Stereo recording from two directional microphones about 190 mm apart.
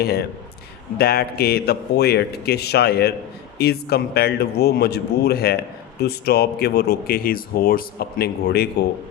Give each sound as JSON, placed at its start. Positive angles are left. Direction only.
{"t": 0.0, "sound": "speech", "side_deg": 55}